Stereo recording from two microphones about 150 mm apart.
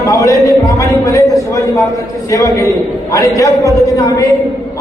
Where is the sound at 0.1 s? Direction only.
20° left (ahead or behind).